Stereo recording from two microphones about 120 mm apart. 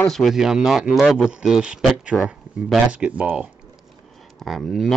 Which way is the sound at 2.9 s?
10° right (ahead or behind).